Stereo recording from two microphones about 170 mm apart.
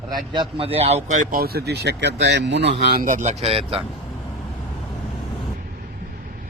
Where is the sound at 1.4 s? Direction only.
65° right (ahead or behind); by 3.8 s 35° right (ahead or behind).